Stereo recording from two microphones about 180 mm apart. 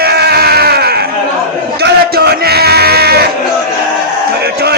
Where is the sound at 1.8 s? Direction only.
65° right (ahead or behind).